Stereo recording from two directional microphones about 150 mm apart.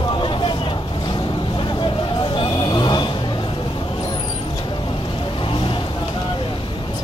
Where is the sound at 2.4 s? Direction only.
30° left (ahead or behind).